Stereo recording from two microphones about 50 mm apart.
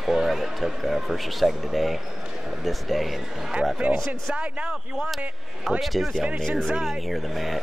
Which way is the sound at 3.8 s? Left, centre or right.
Right.